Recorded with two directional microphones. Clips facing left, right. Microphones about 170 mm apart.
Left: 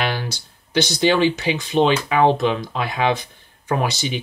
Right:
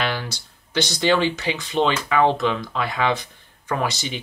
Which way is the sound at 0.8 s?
15° left (ahead or behind).